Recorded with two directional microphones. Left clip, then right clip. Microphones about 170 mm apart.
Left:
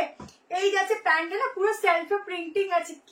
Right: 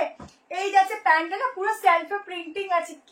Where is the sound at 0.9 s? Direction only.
15° left (ahead or behind).